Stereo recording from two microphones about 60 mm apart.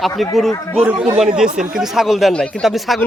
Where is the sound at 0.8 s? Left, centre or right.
Right.